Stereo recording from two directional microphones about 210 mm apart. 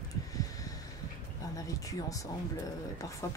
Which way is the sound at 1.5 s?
15° left (ahead or behind).